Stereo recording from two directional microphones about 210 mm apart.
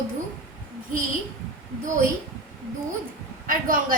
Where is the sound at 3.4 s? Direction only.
40° right (ahead or behind).